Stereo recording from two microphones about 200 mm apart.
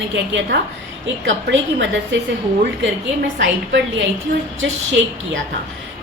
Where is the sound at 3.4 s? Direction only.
70° right (ahead or behind).